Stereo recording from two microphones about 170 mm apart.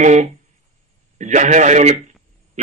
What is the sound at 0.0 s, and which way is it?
Speech, 45° right (ahead or behind).